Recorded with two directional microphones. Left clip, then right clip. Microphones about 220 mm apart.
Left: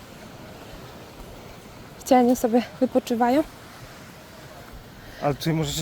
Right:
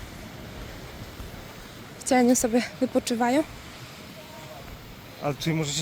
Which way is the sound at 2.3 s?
10° left (ahead or behind).